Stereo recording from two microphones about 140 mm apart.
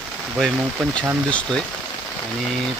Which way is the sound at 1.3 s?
5° left (ahead or behind).